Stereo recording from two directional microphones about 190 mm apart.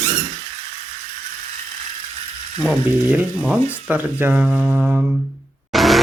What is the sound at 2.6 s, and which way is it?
Speech, 5° right (ahead or behind).